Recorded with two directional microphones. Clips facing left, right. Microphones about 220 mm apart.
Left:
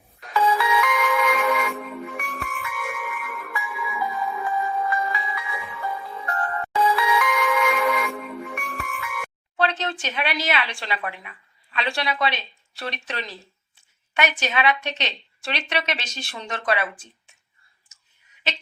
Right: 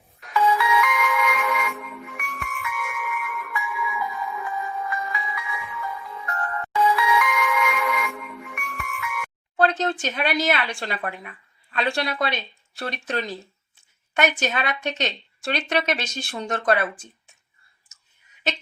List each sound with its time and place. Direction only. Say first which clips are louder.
0.2 s music: even; 30° left (ahead or behind)
9.6 s a woman's voice: right 3 dB; 50° right (ahead or behind)